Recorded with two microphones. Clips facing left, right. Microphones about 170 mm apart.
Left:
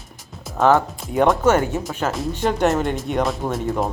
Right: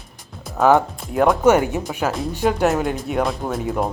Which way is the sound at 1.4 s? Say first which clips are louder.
Right 2 dB; 15° right (ahead or behind).